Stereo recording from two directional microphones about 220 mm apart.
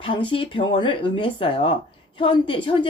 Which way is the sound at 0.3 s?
25° left (ahead or behind).